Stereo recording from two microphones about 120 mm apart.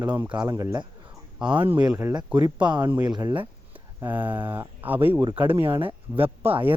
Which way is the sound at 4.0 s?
15° right (ahead or behind).